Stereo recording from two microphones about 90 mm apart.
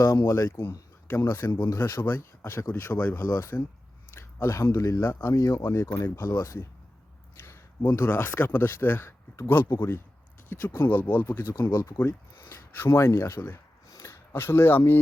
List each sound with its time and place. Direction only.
0.3 s speech: 35° left (ahead or behind)
1.0 s speech: 25° left (ahead or behind)
10.5 s speech: 25° left (ahead or behind)
13.8 s a sound: 35° left (ahead or behind)